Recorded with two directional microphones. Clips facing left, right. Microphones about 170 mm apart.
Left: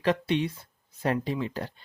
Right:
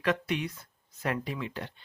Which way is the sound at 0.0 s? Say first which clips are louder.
Left 4 dB; 30° left (ahead or behind).